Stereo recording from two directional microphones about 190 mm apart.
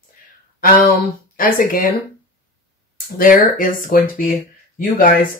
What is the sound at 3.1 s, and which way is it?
Speech, 45° left (ahead or behind).